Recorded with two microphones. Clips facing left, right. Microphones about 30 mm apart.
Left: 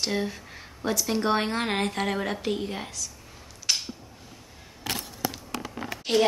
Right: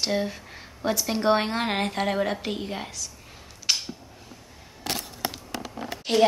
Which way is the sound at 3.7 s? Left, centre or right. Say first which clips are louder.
Right 1 dB; centre.